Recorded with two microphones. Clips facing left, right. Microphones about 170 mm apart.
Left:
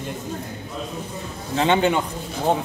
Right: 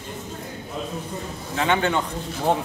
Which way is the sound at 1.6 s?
20° left (ahead or behind).